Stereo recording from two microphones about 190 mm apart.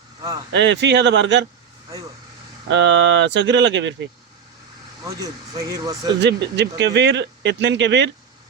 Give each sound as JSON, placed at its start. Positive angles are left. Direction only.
{"t": 0.2, "sound": "speech", "side_deg": -20}
{"t": 0.5, "sound": "speech", "side_deg": -70}
{"t": 2.6, "sound": "speech", "side_deg": -70}
{"t": 5.0, "sound": "speech", "side_deg": -15}
{"t": 6.1, "sound": "speech", "side_deg": -65}